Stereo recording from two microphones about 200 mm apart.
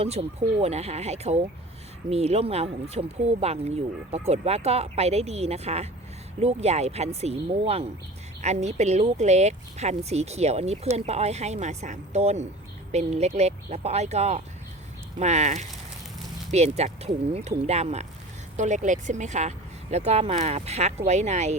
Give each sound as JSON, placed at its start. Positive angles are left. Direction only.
{"t": 0.0, "sound": "speech", "side_deg": -30}